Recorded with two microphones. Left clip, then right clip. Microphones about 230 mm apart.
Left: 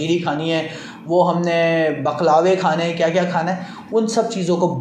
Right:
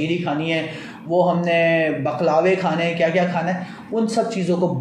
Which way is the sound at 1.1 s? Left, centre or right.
Centre.